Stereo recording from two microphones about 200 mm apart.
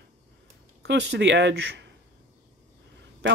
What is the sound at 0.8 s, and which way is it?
Speech, 60° right (ahead or behind).